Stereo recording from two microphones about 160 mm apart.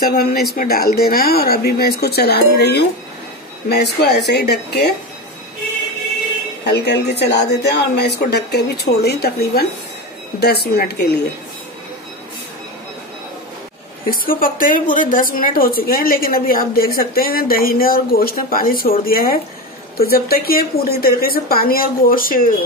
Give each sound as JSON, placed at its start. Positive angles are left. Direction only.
{"t": 0.1, "sound": "a woman's voice", "side_deg": 70}
{"t": 6.6, "sound": "a woman's voice", "side_deg": 90}
{"t": 14.1, "sound": "a woman's voice", "side_deg": 60}